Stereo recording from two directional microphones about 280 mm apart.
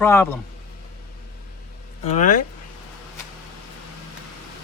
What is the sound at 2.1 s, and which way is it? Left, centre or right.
Speech, left.